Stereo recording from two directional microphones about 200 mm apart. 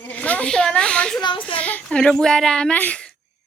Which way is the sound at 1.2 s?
25° left (ahead or behind).